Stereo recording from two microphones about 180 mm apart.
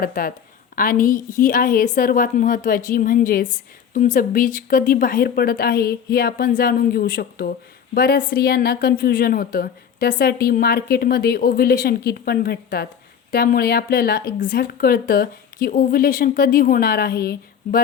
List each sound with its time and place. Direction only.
0.0 s a woman's voice: 50° left (ahead or behind)